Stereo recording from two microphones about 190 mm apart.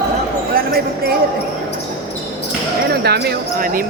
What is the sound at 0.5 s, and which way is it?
Speech, 55° right (ahead or behind).